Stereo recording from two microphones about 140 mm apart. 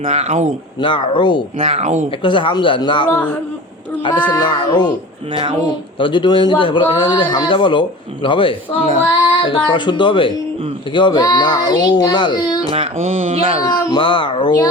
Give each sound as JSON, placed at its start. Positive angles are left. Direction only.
{"t": 0.1, "sound": "mantra", "side_deg": -50}
{"t": 0.8, "sound": "speech", "side_deg": 35}
{"t": 1.5, "sound": "mantra", "side_deg": -50}
{"t": 2.2, "sound": "speech", "side_deg": 35}
{"t": 4.3, "sound": "speech", "side_deg": 30}
{"t": 6.0, "sound": "speech", "side_deg": 35}
{"t": 12.7, "sound": "mantra", "side_deg": -45}
{"t": 13.6, "sound": "speech", "side_deg": 30}